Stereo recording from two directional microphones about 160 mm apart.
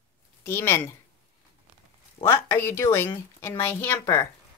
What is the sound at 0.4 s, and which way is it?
Speech, 15° left (ahead or behind).